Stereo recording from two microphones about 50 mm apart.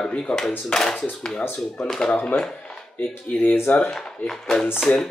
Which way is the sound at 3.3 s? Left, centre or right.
Left.